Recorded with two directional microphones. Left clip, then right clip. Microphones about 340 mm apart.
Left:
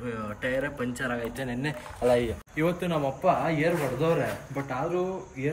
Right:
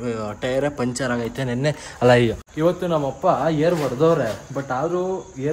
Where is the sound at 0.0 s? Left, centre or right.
Centre.